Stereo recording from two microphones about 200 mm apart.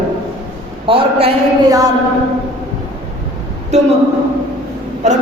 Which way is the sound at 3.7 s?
35° right (ahead or behind).